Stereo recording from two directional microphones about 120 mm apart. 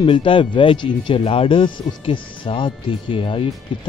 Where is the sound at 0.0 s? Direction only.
45° left (ahead or behind).